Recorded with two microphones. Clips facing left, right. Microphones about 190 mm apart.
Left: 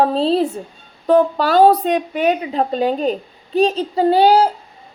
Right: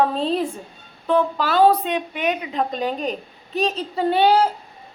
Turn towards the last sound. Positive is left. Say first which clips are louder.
# left 4 dB
turn(degrees=30)  # may be behind; listen again after turning